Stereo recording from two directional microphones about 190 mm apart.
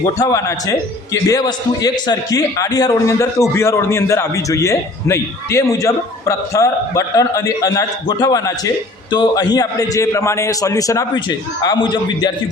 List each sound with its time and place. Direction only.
0.2 s a man's voice: 15° left (ahead or behind)